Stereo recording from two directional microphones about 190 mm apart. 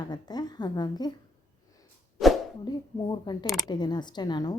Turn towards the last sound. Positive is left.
turn(degrees=20)  # may be behind; listen again after turning